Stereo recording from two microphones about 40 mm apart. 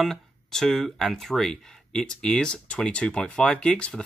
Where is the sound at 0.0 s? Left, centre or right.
Centre.